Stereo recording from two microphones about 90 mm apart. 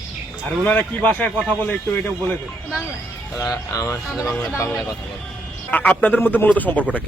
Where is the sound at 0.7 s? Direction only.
20° left (ahead or behind).